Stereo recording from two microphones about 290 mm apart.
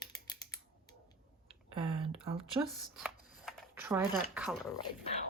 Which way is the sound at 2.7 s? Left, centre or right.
Centre.